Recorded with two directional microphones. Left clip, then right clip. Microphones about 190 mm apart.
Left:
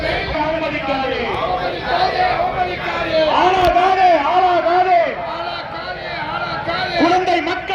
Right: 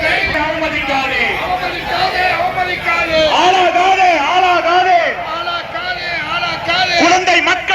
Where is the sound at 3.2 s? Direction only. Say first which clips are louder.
Right 2 dB; 55° left (ahead or behind).